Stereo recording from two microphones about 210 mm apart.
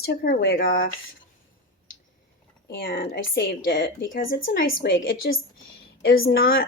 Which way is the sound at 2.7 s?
45° left (ahead or behind).